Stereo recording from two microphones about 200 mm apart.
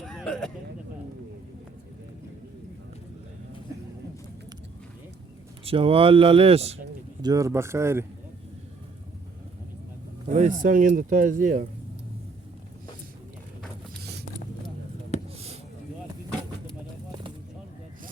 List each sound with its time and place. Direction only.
0.0 s a sound: centre (ahead or behind)
5.6 s speech: 25° right (ahead or behind)
7.2 s speech: 20° right (ahead or behind)
10.2 s speech: 35° right (ahead or behind)
14.0 s vehicle: 55° right (ahead or behind)
15.1 s a sound: 30° left (ahead or behind)